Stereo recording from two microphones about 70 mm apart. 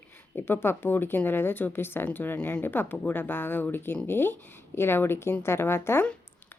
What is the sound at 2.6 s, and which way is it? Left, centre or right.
A woman's voice, left.